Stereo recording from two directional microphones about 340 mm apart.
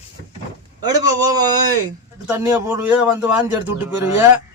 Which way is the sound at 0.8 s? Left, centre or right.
Centre.